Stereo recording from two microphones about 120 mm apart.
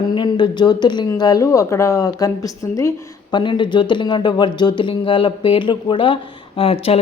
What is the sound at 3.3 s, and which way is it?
A woman's voice, 40° left (ahead or behind).